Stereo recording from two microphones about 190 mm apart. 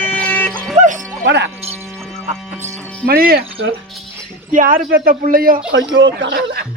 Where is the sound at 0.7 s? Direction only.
40° right (ahead or behind).